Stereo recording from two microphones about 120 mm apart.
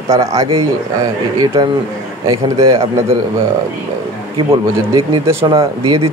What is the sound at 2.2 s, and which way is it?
Speech, 25° right (ahead or behind).